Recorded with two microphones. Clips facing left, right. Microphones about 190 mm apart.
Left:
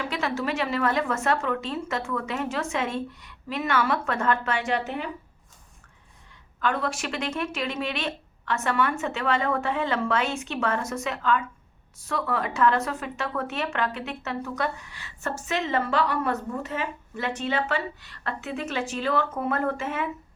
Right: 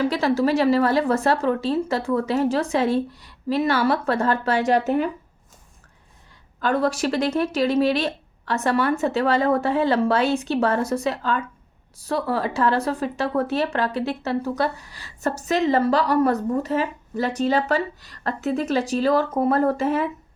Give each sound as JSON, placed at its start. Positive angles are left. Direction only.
{"t": 0.0, "sound": "speech", "side_deg": -35}
{"t": 6.6, "sound": "speech", "side_deg": -35}